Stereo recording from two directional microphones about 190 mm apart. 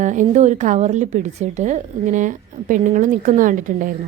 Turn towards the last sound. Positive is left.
turn(degrees=-45)  # may be behind; listen again after turning